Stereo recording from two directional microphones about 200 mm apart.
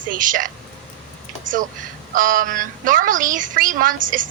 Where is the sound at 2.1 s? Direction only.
45° right (ahead or behind).